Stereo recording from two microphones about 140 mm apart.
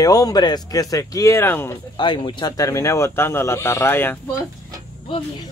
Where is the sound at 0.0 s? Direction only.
25° left (ahead or behind).